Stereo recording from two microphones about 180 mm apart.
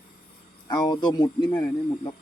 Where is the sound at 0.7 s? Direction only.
20° left (ahead or behind).